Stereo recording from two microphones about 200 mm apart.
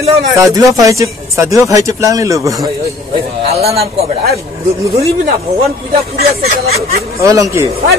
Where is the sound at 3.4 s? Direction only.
30° right (ahead or behind).